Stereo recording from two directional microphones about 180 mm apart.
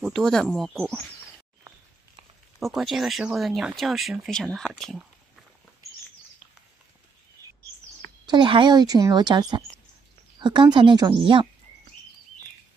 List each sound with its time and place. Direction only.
0.0 s speech: centre (ahead or behind)
2.6 s speech: centre (ahead or behind)
8.3 s a woman's voice: 25° right (ahead or behind)